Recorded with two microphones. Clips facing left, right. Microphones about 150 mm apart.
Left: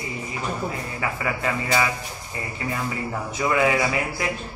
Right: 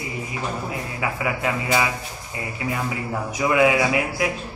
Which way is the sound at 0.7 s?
10° right (ahead or behind).